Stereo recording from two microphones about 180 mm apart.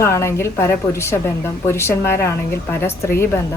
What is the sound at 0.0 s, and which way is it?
Speech, 15° left (ahead or behind).